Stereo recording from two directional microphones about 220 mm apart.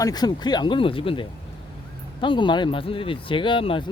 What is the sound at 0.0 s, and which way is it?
Speech, 20° left (ahead or behind).